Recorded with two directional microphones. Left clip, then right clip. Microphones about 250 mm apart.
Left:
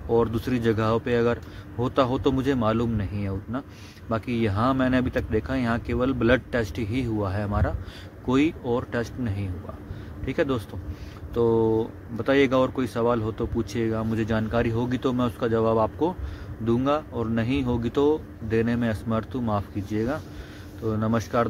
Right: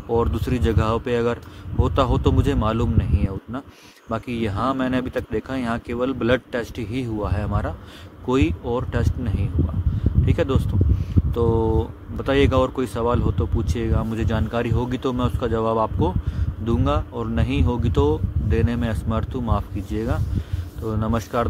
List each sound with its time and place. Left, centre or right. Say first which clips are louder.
0.1 s speech: right 1 dB; centre